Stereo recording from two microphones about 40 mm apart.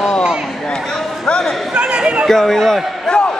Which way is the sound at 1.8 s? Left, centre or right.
Right.